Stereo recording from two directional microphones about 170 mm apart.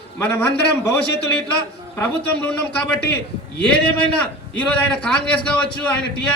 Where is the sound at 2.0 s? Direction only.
10° left (ahead or behind).